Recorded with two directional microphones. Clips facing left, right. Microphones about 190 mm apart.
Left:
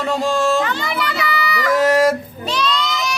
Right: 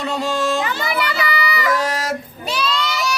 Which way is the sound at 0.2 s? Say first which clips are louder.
Left 2 dB; 50° left (ahead or behind).